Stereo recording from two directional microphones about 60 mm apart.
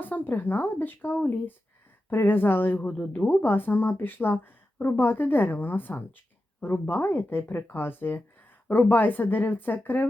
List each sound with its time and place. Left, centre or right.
0.0 s speech: left